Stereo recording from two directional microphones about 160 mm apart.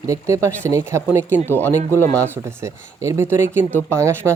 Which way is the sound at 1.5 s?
10° left (ahead or behind).